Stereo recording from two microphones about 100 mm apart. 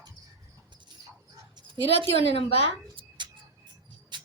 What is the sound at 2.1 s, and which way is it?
Speech, 90° left.